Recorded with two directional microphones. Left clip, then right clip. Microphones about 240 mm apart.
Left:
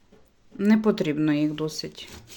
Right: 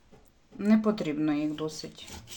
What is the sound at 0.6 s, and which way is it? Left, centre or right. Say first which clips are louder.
Speech: left 5 dB; left.